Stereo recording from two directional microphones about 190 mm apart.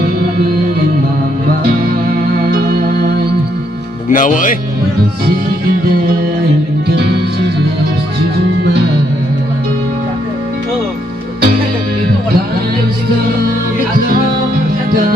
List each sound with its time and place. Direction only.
2.4 s music: 55° right (ahead or behind)
4.1 s speech: 45° left (ahead or behind)